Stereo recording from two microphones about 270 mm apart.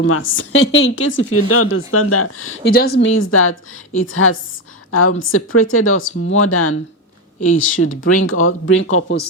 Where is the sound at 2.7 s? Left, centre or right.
Left.